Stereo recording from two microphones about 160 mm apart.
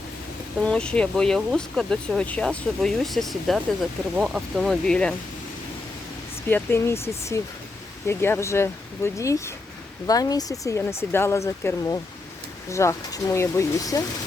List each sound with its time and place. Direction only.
0.6 s speech: 5° left (ahead or behind)
6.5 s speech: 15° left (ahead or behind)